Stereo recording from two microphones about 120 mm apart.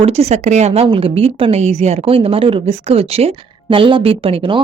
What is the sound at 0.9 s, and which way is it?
Speech, 50° right (ahead or behind).